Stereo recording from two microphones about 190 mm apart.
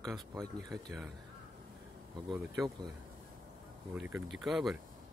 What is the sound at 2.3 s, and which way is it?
Speech, centre (ahead or behind).